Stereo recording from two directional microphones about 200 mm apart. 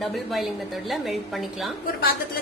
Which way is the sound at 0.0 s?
Centre (ahead or behind).